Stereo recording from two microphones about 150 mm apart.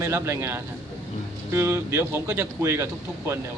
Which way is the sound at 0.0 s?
20° right (ahead or behind).